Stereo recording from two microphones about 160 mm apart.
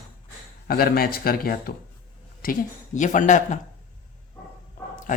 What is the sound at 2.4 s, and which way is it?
A woman's voice, 55° left (ahead or behind).